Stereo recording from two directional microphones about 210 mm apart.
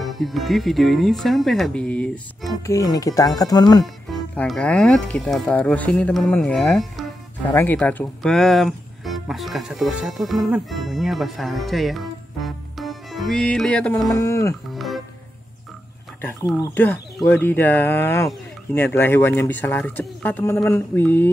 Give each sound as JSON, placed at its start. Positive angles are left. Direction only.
{"t": 0.0, "sound": "speech", "side_deg": 0}
{"t": 2.6, "sound": "speech", "side_deg": 15}
{"t": 3.8, "sound": "speech", "side_deg": 0}
{"t": 14.1, "sound": "speech", "side_deg": 15}
{"t": 16.2, "sound": "speech", "side_deg": 10}